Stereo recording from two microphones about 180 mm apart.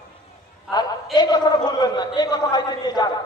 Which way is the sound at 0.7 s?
20° left (ahead or behind).